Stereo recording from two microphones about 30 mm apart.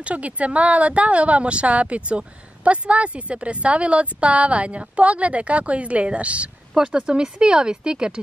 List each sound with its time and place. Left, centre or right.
0.0 s speech: right
6.8 s speech: right